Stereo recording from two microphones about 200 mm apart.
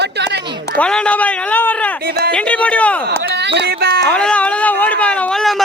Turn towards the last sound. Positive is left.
turn(degrees=0)  # may be behind; listen again after turning